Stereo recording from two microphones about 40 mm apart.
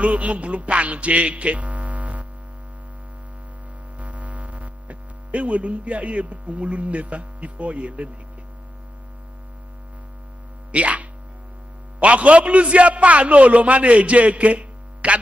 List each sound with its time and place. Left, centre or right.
0.0 s music: right
4.0 s hum: right
10.7 s a man's voice: right